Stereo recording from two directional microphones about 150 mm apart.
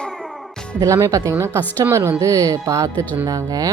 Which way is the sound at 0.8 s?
20° right (ahead or behind).